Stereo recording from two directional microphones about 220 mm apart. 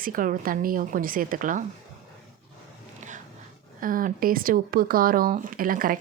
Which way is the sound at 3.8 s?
40° right (ahead or behind).